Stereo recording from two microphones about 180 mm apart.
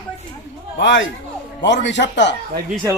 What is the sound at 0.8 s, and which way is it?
Speech, 85° left.